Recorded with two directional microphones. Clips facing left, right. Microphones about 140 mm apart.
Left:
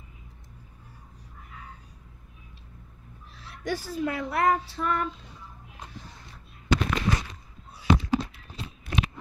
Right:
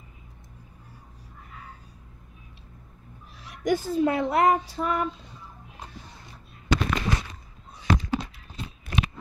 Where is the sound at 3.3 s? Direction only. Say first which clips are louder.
Right 6 dB; 15° right (ahead or behind).